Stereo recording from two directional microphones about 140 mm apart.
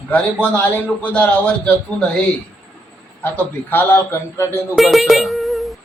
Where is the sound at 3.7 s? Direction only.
15° left (ahead or behind).